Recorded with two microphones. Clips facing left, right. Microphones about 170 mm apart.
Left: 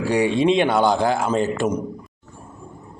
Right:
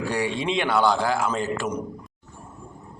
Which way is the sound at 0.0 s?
15° left (ahead or behind).